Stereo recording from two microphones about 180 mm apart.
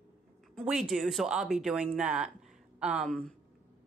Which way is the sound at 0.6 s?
Centre (ahead or behind).